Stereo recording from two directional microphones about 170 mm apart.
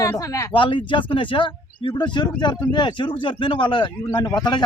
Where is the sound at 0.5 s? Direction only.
30° left (ahead or behind).